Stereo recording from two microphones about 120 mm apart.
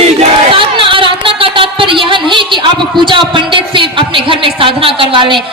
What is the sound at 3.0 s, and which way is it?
Speech, 45° right (ahead or behind).